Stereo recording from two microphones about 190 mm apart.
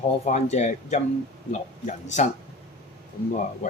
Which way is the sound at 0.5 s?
35° left (ahead or behind).